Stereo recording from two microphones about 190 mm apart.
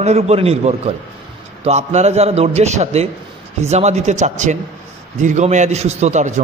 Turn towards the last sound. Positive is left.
turn(degrees=-40)  # may be behind; listen again after turning